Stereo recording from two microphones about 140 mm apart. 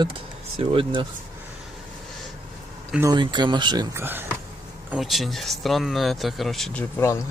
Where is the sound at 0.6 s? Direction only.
40° right (ahead or behind).